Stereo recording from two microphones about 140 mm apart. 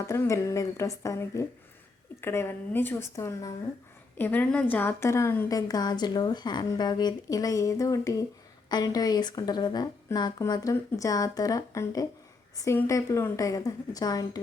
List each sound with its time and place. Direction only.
0.1 s a woman's voice: 20° left (ahead or behind)